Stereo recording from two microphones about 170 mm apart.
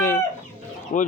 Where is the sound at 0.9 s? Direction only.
45° left (ahead or behind).